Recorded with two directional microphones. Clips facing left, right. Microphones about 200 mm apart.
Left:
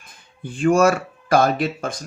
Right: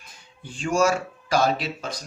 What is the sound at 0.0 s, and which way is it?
Speech, 55° left (ahead or behind).